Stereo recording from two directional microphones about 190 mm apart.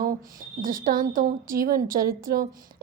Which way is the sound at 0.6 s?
45° right (ahead or behind).